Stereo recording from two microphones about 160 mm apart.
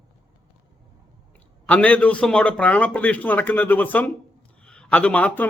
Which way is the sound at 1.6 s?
10° left (ahead or behind).